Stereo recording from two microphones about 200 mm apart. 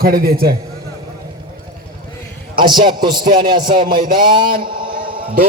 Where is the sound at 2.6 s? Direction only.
20° right (ahead or behind).